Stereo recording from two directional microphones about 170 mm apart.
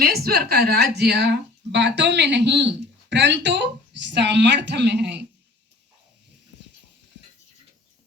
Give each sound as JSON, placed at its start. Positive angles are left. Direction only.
{"t": 0.0, "sound": "speech", "side_deg": -65}